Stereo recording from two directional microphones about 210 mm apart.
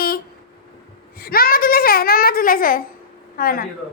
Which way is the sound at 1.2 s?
45° left (ahead or behind).